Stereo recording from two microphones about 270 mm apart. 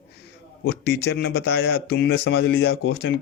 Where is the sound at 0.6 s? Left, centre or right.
Left.